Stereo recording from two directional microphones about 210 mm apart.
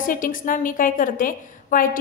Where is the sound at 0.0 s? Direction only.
40° left (ahead or behind).